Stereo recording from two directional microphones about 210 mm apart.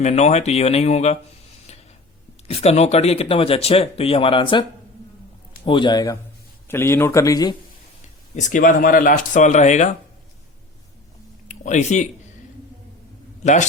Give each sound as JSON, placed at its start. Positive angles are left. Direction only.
{"t": 0.0, "sound": "speech", "side_deg": 35}
{"t": 2.5, "sound": "speech", "side_deg": 30}
{"t": 5.6, "sound": "speech", "side_deg": 20}
{"t": 8.4, "sound": "speech", "side_deg": 35}
{"t": 11.4, "sound": "speech", "side_deg": 35}
{"t": 13.4, "sound": "a man's voice", "side_deg": 35}